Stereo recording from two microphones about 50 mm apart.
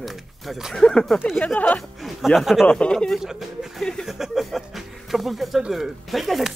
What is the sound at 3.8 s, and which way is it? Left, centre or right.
Speech, centre.